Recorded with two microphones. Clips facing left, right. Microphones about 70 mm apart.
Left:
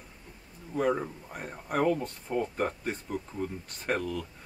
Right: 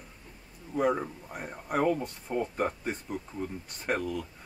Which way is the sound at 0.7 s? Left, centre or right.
Centre.